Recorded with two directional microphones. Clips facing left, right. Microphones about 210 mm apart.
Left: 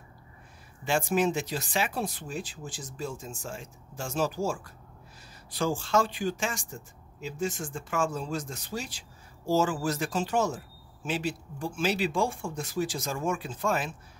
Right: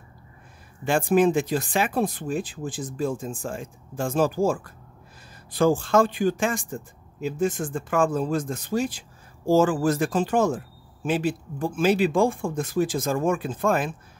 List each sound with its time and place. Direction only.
0.8 s speech: 55° right (ahead or behind)